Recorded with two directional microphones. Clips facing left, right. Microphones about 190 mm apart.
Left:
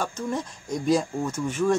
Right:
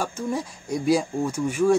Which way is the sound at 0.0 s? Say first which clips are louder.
Right 1 dB; 10° right (ahead or behind).